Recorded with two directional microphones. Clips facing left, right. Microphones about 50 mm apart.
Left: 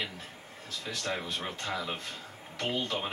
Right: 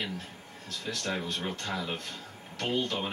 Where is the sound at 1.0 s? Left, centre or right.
Centre.